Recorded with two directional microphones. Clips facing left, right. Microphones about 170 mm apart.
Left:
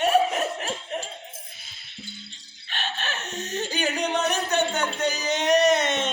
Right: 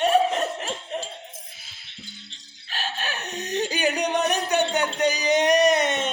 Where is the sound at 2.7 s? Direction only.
10° right (ahead or behind).